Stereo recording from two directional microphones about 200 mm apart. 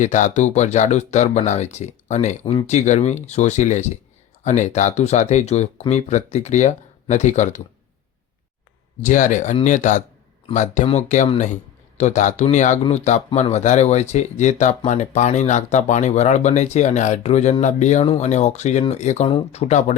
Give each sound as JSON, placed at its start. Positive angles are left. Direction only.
{"t": 0.0, "sound": "speech", "side_deg": 40}
{"t": 9.0, "sound": "speech", "side_deg": 40}